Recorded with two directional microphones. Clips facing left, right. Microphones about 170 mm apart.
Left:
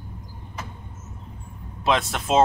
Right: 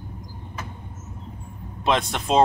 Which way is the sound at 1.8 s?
Centre (ahead or behind).